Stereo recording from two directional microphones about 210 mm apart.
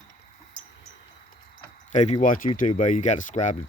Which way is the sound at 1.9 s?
35° left (ahead or behind).